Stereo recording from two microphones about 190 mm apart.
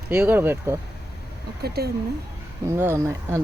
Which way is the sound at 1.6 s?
55° right (ahead or behind).